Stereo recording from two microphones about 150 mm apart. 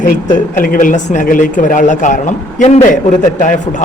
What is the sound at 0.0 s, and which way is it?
Speech, 60° left (ahead or behind).